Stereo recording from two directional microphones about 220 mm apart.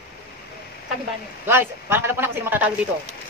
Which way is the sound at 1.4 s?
10° right (ahead or behind).